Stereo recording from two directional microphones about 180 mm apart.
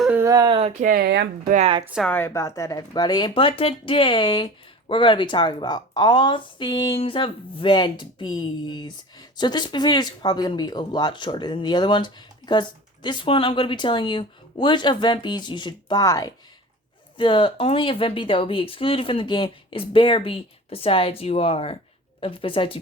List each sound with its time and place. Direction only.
0.0 s speech: 10° right (ahead or behind); by 0.7 s 25° right (ahead or behind)
0.8 s speech: 55° right (ahead or behind)
1.6 s speech: 30° right (ahead or behind)
2.0 s a woman's voice: 10° left (ahead or behind); by 22.8 s 30° left (ahead or behind)